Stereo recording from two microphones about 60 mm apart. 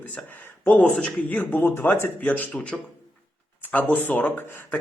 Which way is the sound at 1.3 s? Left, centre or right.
Left.